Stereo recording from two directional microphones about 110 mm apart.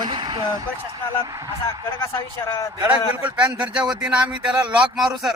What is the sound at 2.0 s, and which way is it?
A man's voice, 25° left (ahead or behind).